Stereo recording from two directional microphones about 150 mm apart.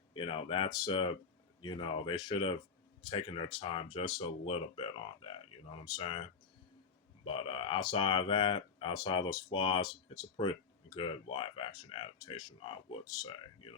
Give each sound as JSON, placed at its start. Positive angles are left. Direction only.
{"t": 0.1, "sound": "speech", "side_deg": 35}
{"t": 7.3, "sound": "speech", "side_deg": 35}